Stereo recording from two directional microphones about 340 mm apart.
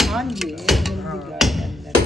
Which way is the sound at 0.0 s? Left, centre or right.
Centre.